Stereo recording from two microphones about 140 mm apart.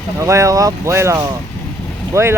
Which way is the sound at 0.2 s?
20° right (ahead or behind).